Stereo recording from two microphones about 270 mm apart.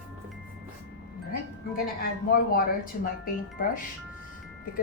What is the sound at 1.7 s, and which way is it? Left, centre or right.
Speech, left.